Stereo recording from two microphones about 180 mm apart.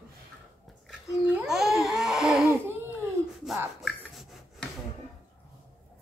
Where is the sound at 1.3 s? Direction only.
5° right (ahead or behind).